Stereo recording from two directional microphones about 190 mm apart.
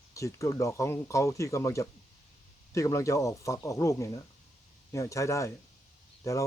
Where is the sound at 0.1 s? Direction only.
15° left (ahead or behind).